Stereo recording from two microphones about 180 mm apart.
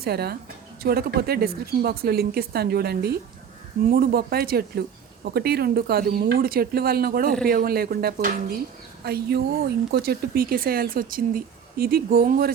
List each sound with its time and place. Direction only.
0.0 s speech: 60° right (ahead or behind)